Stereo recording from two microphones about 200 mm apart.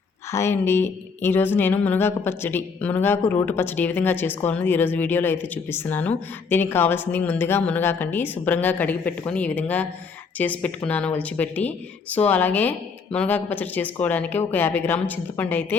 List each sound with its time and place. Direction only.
0.3 s speech: 15° left (ahead or behind)